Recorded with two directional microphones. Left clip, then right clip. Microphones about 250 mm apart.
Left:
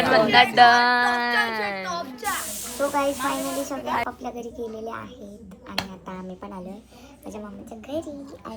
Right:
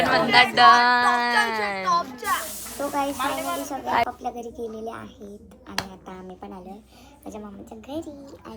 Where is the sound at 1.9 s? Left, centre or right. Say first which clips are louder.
Right 6 dB; right.